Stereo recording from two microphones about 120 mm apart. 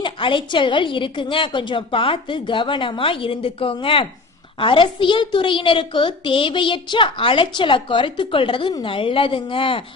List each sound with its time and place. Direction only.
0.0 s a woman's voice: 45° left (ahead or behind)